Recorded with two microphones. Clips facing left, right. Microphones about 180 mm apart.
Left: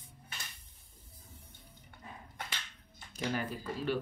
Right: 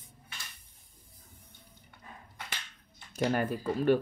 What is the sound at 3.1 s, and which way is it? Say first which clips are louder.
Speech: right 7 dB; 50° right (ahead or behind).